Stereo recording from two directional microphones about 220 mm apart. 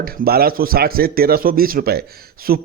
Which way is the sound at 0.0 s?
45° right (ahead or behind).